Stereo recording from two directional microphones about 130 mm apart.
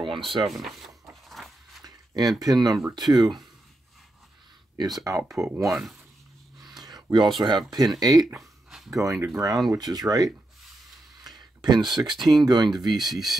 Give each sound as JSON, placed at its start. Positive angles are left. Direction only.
{"t": 0.0, "sound": "a sound", "side_deg": -40}
{"t": 0.4, "sound": "speech", "side_deg": 0}
{"t": 1.3, "sound": "a sound", "side_deg": 0}
{"t": 1.8, "sound": "speech", "side_deg": -30}
{"t": 4.7, "sound": "speech", "side_deg": -30}
{"t": 5.7, "sound": "speech", "side_deg": 0}
{"t": 6.8, "sound": "speech", "side_deg": -30}
{"t": 8.4, "sound": "a sound", "side_deg": 0}
{"t": 8.9, "sound": "speech", "side_deg": -25}
{"t": 11.2, "sound": "a sound", "side_deg": -30}
{"t": 12.3, "sound": "speech", "side_deg": -30}
{"t": 13.0, "sound": "speech", "side_deg": 0}